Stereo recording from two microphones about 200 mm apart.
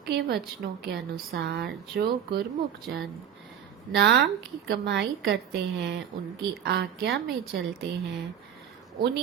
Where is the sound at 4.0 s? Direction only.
60° right (ahead or behind).